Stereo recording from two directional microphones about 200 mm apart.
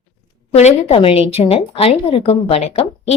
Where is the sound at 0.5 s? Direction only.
30° left (ahead or behind).